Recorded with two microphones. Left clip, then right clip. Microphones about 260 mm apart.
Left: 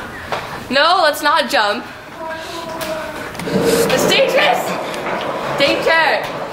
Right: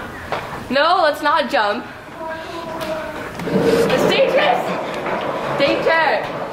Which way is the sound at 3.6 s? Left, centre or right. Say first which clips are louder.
Left 1 dB; centre.